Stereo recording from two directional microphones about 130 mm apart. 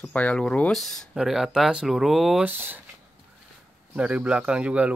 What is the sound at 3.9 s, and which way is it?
Speech, 10° right (ahead or behind).